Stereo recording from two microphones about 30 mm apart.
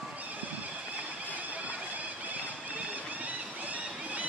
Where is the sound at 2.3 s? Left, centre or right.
Right.